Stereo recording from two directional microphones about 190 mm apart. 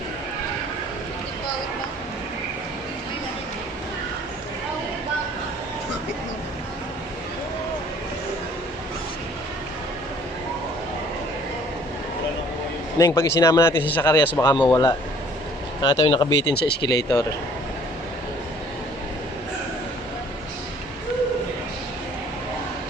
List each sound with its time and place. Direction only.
13.0 s a man's voice: 15° left (ahead or behind)
16.6 s speech: 60° left (ahead or behind)